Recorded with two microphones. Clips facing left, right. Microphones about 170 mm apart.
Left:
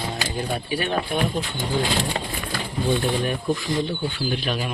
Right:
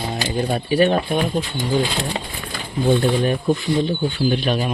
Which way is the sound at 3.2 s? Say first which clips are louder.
Right 5 dB; 25° right (ahead or behind).